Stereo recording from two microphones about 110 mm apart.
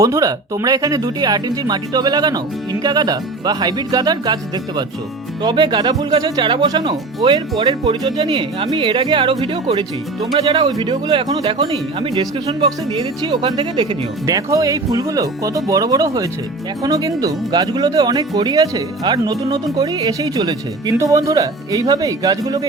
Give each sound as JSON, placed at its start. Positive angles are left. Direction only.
{"t": 0.0, "sound": "speech", "side_deg": -30}
{"t": 9.4, "sound": "speech", "side_deg": -65}
{"t": 9.7, "sound": "speech", "side_deg": -35}
{"t": 11.7, "sound": "speech", "side_deg": -65}
{"t": 12.6, "sound": "speech", "side_deg": -45}
{"t": 14.3, "sound": "speech", "side_deg": -30}